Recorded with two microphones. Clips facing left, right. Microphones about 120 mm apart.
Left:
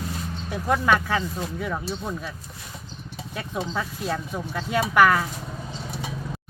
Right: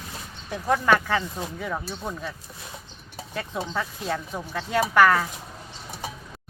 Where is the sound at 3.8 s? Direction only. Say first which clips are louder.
Right 1 dB; 5° left (ahead or behind).